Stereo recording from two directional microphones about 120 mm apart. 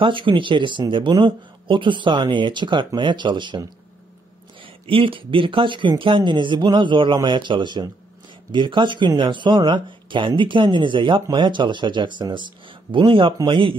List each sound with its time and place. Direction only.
0.0 s speech: 45° right (ahead or behind)
4.8 s speech: 45° right (ahead or behind)